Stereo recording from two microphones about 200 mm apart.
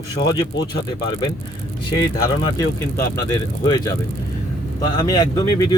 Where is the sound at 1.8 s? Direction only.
20° left (ahead or behind).